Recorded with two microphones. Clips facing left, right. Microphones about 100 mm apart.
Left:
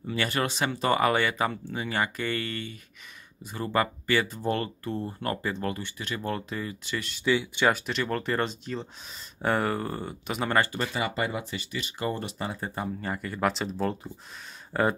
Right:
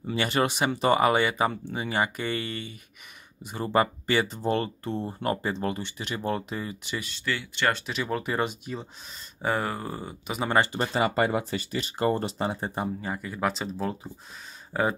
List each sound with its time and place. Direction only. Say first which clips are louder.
0.1 s speech: right 3 dB; 20° right (ahead or behind)
7.2 s speech: left 7 dB; 15° left (ahead or behind); by 10.5 s 5° right (ahead or behind)
10.5 s speech: right 3 dB; 25° right (ahead or behind)
13.0 s speech: left 1 dB; 5° right (ahead or behind)